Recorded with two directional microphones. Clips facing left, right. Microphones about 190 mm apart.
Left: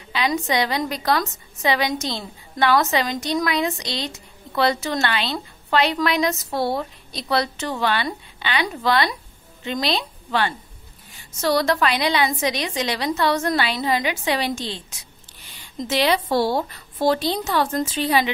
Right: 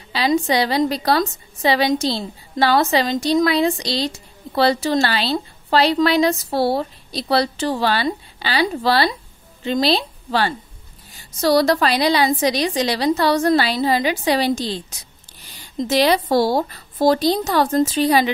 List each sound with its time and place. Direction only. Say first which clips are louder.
0.1 s a woman's voice: right 4 dB; 35° right (ahead or behind)